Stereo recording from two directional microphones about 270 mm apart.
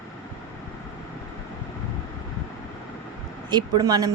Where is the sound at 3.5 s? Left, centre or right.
Centre.